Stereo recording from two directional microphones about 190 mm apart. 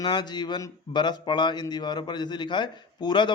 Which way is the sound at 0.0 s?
25° left (ahead or behind).